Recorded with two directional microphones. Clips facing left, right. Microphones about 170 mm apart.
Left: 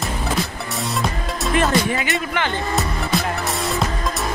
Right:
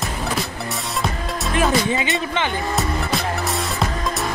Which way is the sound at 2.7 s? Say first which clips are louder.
Even; centre (ahead or behind).